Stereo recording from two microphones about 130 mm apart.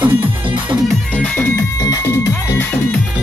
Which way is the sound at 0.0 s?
15° right (ahead or behind).